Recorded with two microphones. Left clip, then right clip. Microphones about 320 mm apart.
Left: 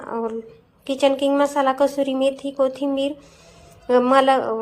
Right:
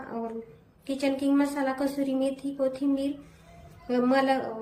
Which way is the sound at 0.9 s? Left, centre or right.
Centre.